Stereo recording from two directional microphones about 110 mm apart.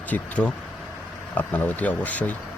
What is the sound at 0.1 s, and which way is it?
Speech, 10° left (ahead or behind).